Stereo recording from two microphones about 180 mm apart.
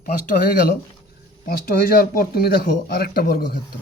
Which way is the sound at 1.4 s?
55° left (ahead or behind).